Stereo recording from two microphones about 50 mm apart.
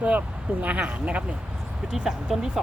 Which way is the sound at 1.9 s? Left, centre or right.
Centre.